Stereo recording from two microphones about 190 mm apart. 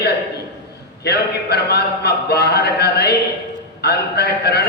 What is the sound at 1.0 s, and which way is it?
A man's voice, 60° left (ahead or behind).